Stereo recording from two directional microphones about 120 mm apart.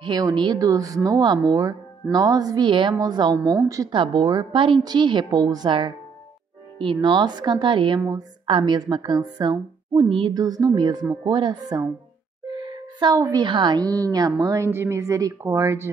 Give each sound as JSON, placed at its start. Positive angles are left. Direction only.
{"t": 0.0, "sound": "speech", "side_deg": -40}
{"t": 3.9, "sound": "speech", "side_deg": -40}
{"t": 10.3, "sound": "speech", "side_deg": -35}
{"t": 12.4, "sound": "music", "side_deg": -40}
{"t": 13.2, "sound": "speech", "side_deg": -35}